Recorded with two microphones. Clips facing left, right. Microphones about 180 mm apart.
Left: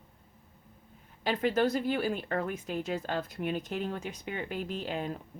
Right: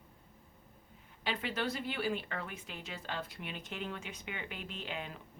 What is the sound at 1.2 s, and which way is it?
Speech, 45° left (ahead or behind).